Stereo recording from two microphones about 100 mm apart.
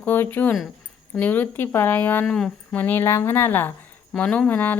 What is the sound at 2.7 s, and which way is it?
Speech, 20° left (ahead or behind).